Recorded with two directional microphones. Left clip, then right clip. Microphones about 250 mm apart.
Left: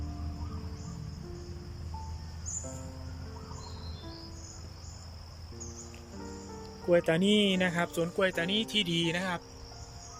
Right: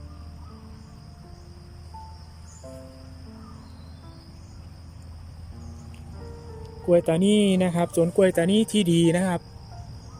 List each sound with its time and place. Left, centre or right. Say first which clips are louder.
6.8 s speech: right 6 dB; centre